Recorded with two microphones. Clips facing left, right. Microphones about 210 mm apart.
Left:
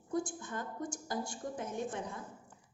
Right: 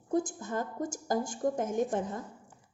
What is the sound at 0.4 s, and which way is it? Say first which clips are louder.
Speech: right 6 dB; 45° right (ahead or behind).